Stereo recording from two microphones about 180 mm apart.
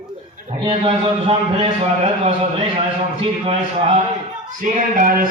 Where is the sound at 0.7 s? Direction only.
30° right (ahead or behind).